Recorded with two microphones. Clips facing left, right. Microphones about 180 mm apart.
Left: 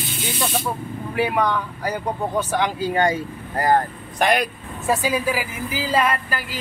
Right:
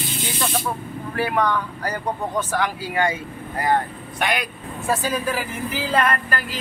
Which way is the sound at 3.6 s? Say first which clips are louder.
Left 3 dB; 40° left (ahead or behind).